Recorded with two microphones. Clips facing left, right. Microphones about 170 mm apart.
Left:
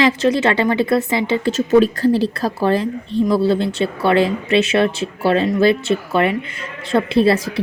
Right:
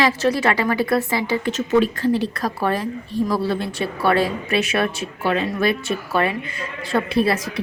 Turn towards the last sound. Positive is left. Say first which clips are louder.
# left 5 dB
turn(degrees=30)  # may be behind; listen again after turning